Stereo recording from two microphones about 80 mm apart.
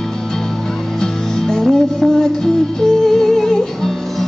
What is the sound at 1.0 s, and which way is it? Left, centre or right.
Music, centre.